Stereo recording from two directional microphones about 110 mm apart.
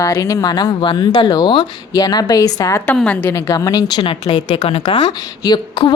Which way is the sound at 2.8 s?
10° left (ahead or behind).